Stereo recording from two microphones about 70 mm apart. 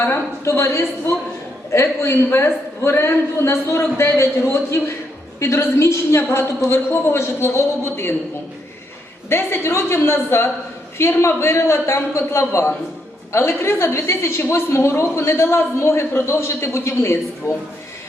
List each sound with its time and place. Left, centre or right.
0.0 s a man's voice: left
5.4 s a man's voice: left
9.3 s a man's voice: left